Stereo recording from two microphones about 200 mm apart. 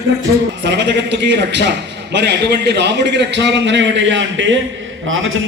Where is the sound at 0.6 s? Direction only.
60° right (ahead or behind).